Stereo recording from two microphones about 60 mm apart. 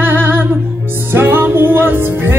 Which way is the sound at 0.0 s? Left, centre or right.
Right.